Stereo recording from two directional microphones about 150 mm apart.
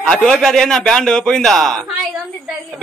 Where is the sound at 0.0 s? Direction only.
5° left (ahead or behind).